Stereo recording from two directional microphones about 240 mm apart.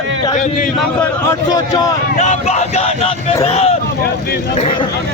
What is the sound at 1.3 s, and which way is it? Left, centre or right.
Speech, centre.